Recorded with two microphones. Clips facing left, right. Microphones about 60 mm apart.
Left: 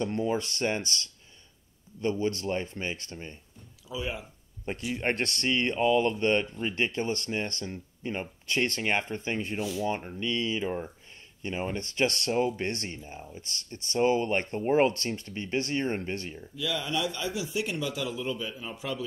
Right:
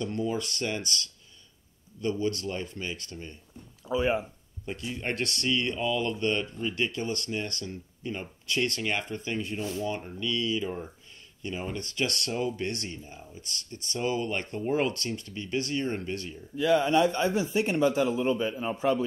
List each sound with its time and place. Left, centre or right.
0.0 s speech: left
3.8 s speech: right
4.6 s speech: left
9.6 s a man's voice: right
9.8 s speech: left
16.5 s a man's voice: right